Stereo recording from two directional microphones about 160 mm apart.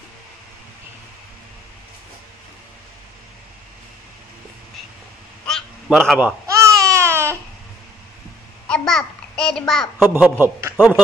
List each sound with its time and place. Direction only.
5.5 s a sound: 5° left (ahead or behind)
5.9 s a man's voice: 5° right (ahead or behind)
6.4 s babbling: 20° right (ahead or behind)
8.6 s babbling: 5° left (ahead or behind)
9.9 s a man's voice: 15° right (ahead or behind)